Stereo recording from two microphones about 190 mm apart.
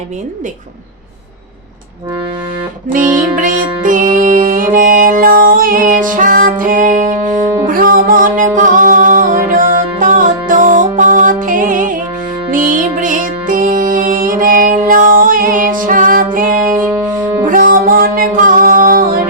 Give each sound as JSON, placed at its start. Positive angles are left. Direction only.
{"t": 3.3, "sound": "music", "side_deg": -45}
{"t": 16.6, "sound": "music", "side_deg": -10}
{"t": 17.4, "sound": "music", "side_deg": -45}